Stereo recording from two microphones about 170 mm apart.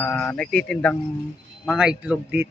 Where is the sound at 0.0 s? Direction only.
10° left (ahead or behind).